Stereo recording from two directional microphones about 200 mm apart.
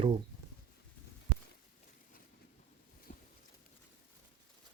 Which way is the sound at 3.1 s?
40° left (ahead or behind).